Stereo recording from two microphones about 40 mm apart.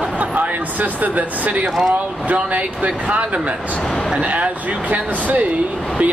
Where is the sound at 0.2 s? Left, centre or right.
Right.